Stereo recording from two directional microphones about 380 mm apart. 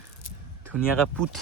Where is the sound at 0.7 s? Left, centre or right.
Centre.